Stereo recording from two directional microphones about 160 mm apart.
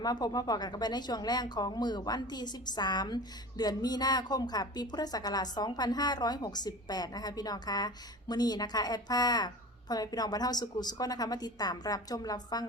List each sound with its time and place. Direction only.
0.0 s a woman's voice: 25° left (ahead or behind)